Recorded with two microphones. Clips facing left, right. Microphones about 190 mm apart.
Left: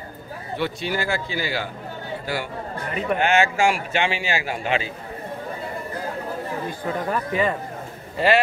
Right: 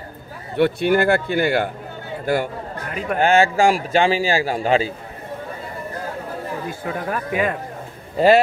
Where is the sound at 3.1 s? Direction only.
35° right (ahead or behind).